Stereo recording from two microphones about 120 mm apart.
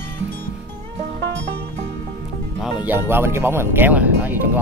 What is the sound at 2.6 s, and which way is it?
Speech, 15° right (ahead or behind).